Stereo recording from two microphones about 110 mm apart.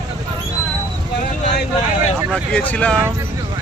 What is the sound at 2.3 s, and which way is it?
Speech, 10° left (ahead or behind).